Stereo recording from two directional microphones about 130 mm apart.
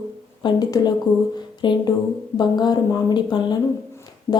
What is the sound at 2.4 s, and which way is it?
Speech, 35° left (ahead or behind).